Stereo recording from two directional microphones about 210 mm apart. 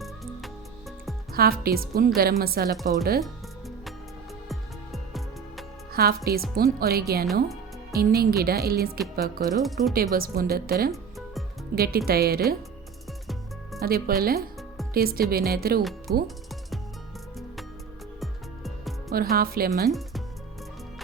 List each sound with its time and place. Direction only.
0.4 s music: centre (ahead or behind)
1.3 s speech: 45° right (ahead or behind)
4.4 s music: centre (ahead or behind)
5.9 s speech: 45° right (ahead or behind)
13.8 s speech: 45° right (ahead or behind)
15.8 s speech: centre (ahead or behind)
16.2 s music: centre (ahead or behind)
18.2 s music: centre (ahead or behind)
19.1 s speech: 45° right (ahead or behind)
19.9 s music: centre (ahead or behind)